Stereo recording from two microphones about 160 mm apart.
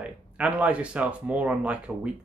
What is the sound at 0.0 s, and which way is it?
Speech, 10° right (ahead or behind).